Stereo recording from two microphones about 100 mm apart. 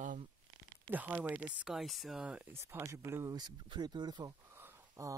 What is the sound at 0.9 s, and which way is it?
Speech, 15° right (ahead or behind).